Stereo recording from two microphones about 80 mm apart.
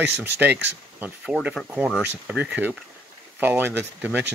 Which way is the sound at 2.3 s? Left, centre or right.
Centre.